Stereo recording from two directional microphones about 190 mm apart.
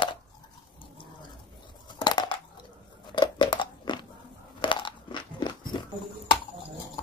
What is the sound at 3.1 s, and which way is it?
Chewing, 25° left (ahead or behind).